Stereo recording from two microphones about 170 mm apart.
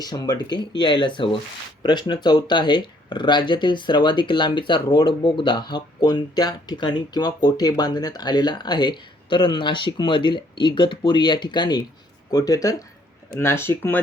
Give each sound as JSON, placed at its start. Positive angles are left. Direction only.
{"t": 0.0, "sound": "speech", "side_deg": 25}